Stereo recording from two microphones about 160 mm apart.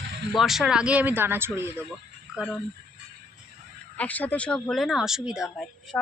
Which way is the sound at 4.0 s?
10° left (ahead or behind).